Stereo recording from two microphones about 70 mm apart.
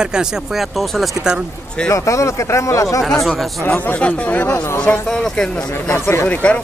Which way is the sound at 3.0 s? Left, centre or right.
Centre.